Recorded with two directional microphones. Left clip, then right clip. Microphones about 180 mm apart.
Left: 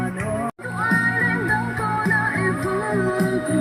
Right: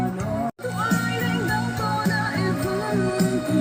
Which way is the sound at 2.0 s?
50° right (ahead or behind).